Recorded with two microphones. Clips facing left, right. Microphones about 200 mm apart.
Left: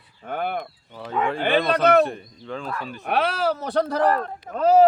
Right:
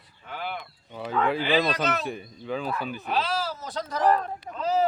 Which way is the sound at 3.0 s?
65° left (ahead or behind).